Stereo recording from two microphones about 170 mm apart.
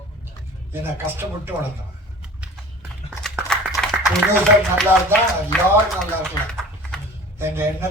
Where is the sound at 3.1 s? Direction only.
Centre (ahead or behind).